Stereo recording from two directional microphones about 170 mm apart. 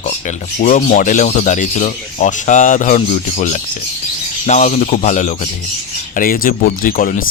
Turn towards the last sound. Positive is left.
turn(degrees=55)  # may be behind; listen again after turning